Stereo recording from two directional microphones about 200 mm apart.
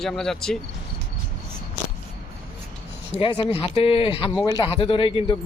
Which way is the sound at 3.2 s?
25° left (ahead or behind).